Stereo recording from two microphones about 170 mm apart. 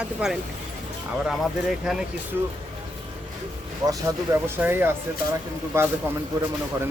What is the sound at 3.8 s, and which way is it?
Speech, 20° right (ahead or behind).